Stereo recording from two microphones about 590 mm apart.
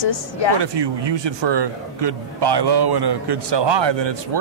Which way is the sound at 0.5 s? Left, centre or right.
Right.